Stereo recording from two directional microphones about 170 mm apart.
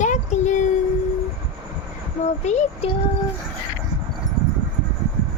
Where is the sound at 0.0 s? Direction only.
45° left (ahead or behind).